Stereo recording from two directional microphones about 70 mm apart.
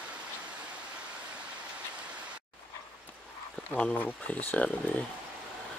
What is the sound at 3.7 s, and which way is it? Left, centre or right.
Speech, centre.